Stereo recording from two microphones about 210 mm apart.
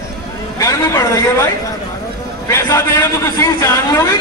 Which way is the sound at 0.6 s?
15° left (ahead or behind).